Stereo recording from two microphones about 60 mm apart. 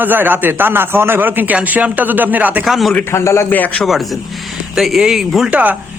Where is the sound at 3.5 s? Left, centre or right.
Left.